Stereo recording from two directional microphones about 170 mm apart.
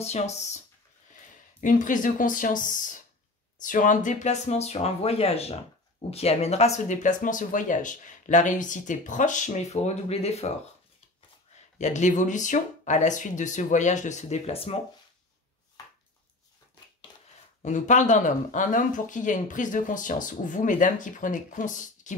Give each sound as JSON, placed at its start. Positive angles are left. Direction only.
{"t": 0.0, "sound": "speech", "side_deg": 40}
{"t": 1.6, "sound": "speech", "side_deg": 50}
{"t": 11.8, "sound": "speech", "side_deg": 45}
{"t": 17.6, "sound": "speech", "side_deg": 45}